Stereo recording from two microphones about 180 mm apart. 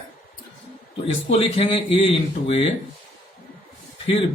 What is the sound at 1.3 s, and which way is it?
Speech, 30° left (ahead or behind).